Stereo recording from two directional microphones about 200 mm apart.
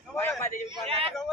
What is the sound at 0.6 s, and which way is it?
Speech, 30° right (ahead or behind).